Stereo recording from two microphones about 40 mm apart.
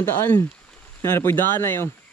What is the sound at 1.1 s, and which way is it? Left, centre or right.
Speech, left.